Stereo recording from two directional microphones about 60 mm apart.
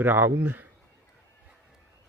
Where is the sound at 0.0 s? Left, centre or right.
Right.